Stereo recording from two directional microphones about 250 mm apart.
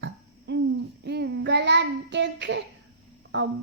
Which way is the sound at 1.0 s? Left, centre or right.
Right.